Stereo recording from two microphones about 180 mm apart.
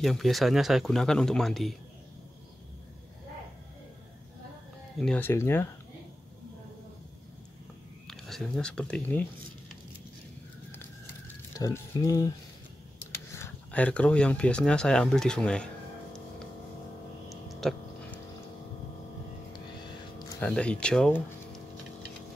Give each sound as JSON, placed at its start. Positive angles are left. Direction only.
{"t": 0.0, "sound": "speech", "side_deg": 0}
{"t": 4.9, "sound": "speech", "side_deg": 5}
{"t": 8.1, "sound": "speech", "side_deg": 0}
{"t": 11.5, "sound": "speech", "side_deg": 20}
{"t": 13.3, "sound": "speech", "side_deg": 10}
{"t": 17.5, "sound": "a sound", "side_deg": 0}
{"t": 20.3, "sound": "speech", "side_deg": 5}